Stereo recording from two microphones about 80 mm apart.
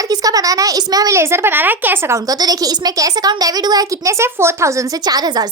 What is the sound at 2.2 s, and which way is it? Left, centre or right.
A child's voice, right.